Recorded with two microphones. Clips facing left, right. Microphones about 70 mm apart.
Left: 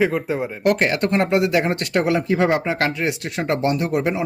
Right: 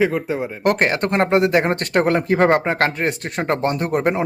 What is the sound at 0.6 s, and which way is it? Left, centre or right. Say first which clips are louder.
Speech: right 1 dB; right.